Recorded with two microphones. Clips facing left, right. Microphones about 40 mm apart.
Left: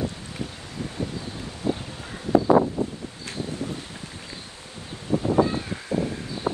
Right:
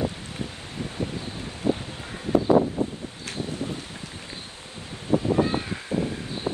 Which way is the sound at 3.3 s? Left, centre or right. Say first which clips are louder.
Even; right.